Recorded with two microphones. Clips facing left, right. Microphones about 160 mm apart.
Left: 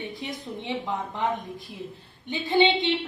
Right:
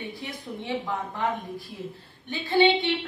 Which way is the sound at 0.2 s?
20° left (ahead or behind).